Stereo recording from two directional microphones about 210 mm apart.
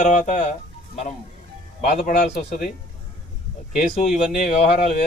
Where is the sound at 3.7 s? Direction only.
40° left (ahead or behind).